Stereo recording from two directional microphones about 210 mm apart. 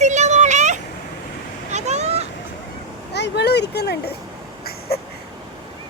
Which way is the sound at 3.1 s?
55° left (ahead or behind).